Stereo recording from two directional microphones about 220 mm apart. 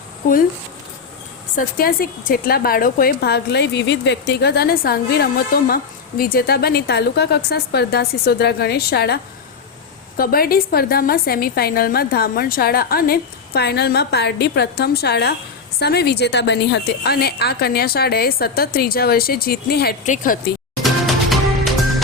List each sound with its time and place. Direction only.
1.5 s a woman's voice: 40° left (ahead or behind)
20.8 s music: centre (ahead or behind)